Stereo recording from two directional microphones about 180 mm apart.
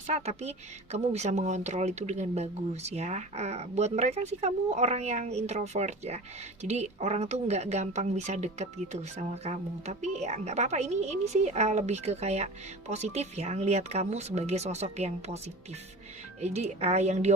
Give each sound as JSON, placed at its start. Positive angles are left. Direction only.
{"t": 0.1, "sound": "speech", "side_deg": -35}
{"t": 16.4, "sound": "speech", "side_deg": -35}